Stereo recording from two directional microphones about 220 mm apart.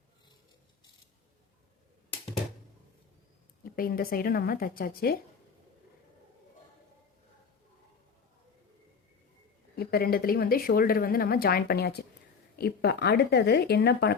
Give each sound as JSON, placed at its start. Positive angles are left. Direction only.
{"t": 3.8, "sound": "a woman's voice", "side_deg": 40}
{"t": 9.7, "sound": "speech", "side_deg": 45}